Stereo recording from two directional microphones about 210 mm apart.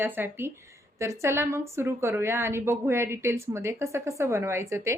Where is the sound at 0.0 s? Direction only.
10° right (ahead or behind).